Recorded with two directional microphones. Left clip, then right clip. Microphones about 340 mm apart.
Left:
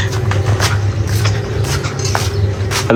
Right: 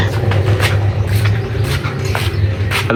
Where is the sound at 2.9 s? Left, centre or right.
Centre.